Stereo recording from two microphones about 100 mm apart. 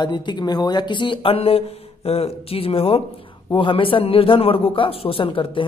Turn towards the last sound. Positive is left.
turn(degrees=60)  # may be behind; listen again after turning